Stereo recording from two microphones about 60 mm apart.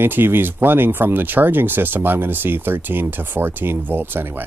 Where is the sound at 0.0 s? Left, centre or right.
Right.